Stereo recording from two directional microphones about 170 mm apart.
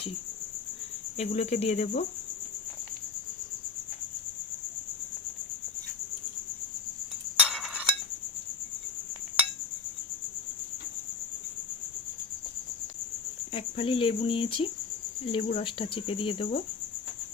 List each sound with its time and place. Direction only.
1.1 s speech: 40° left (ahead or behind)
7.4 s chink: 5° right (ahead or behind)
13.5 s speech: 30° left (ahead or behind)